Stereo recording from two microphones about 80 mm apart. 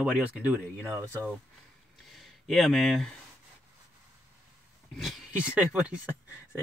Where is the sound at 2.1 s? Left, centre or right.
Centre.